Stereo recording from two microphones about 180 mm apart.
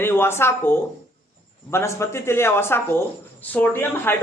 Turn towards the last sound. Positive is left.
turn(degrees=10)  # may be behind; listen again after turning